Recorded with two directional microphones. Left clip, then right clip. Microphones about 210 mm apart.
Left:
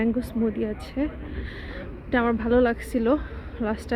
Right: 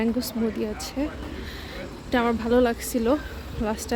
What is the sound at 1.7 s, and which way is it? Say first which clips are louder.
Speech: even; 10° right (ahead or behind).